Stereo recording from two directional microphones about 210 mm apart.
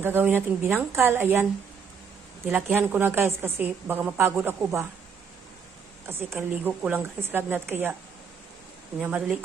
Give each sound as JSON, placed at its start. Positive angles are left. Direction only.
{"t": 0.0, "sound": "a woman's voice", "side_deg": -10}
{"t": 2.5, "sound": "a woman's voice", "side_deg": -10}
{"t": 6.1, "sound": "a woman's voice", "side_deg": -10}
{"t": 9.0, "sound": "speech", "side_deg": -5}